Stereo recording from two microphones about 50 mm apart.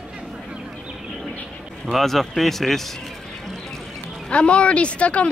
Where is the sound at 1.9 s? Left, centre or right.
Centre.